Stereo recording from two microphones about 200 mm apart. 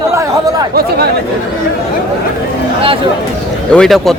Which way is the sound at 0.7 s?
50° right (ahead or behind).